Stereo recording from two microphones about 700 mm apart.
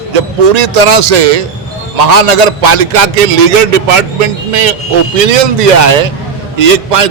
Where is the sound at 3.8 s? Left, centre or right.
Right.